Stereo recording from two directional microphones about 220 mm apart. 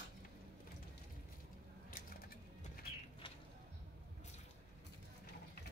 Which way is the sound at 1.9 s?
40° left (ahead or behind).